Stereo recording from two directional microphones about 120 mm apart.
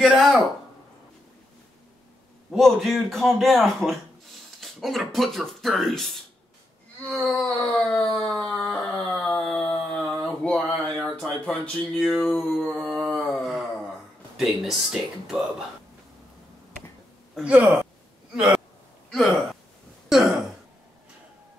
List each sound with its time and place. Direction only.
0.0 s speech: centre (ahead or behind)
2.5 s speech: centre (ahead or behind)
7.1 s a sound: 10° left (ahead or behind)
8.9 s dog: 10° left (ahead or behind)
9.9 s a sound: 5° left (ahead or behind)
12.4 s speech: centre (ahead or behind)
13.1 s a sound: centre (ahead or behind)
14.3 s speech: 5° right (ahead or behind)
17.4 s speech: 10° right (ahead or behind)
20.1 s throat clearing: centre (ahead or behind)